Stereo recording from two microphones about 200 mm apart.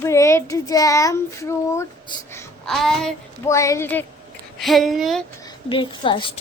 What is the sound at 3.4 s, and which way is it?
A woman's voice, 15° left (ahead or behind).